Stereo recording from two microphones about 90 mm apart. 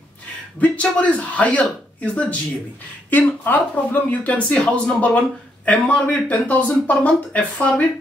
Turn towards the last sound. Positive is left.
turn(degrees=15)  # may be behind; listen again after turning